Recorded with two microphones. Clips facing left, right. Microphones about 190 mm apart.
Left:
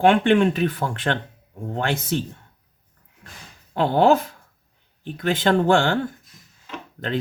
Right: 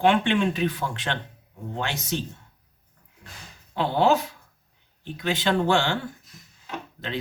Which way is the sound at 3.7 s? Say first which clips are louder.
Left 4 dB; 50° left (ahead or behind).